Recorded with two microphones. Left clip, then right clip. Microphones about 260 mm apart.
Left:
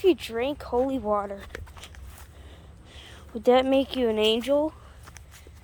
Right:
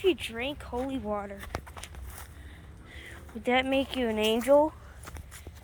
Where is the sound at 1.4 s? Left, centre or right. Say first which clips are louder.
Right 2 dB; right.